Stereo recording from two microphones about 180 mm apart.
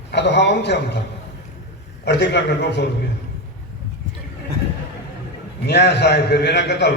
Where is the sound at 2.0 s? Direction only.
75° left (ahead or behind).